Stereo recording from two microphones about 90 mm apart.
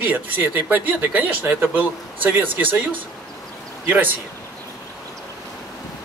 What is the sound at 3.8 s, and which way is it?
Speech, 20° right (ahead or behind).